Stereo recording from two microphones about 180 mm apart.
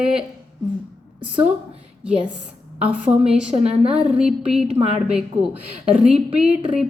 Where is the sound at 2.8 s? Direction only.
5° right (ahead or behind).